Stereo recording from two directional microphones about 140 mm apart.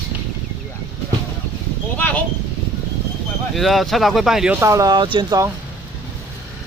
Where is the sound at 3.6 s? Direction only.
Centre (ahead or behind).